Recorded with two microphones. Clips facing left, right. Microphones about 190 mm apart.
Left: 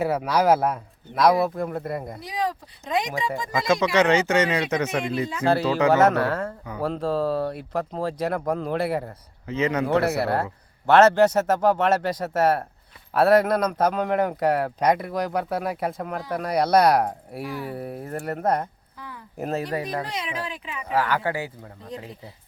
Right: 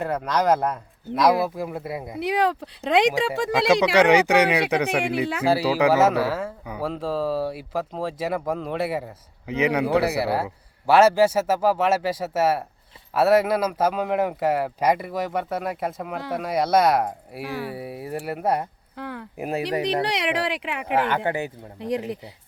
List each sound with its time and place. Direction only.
0.0 s speech: 10° left (ahead or behind)
2.1 s speech: 65° right (ahead or behind)
3.9 s speech: 15° right (ahead or behind)
9.5 s speech: 15° right (ahead or behind)
18.9 s a sound: 70° right (ahead or behind)
19.4 s speech: 15° right (ahead or behind)
19.8 s speech: 80° right
20.9 s speech: 25° right (ahead or behind)
21.8 s speech: 75° right (ahead or behind)